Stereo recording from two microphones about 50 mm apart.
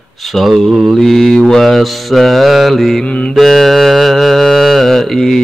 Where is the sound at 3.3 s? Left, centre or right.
Centre.